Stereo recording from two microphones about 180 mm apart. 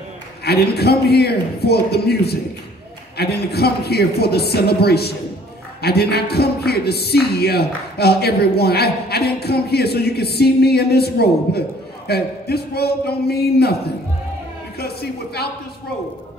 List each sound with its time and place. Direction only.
0.5 s speech: 60° left (ahead or behind)